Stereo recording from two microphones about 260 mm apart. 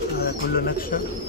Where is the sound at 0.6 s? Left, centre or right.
Left.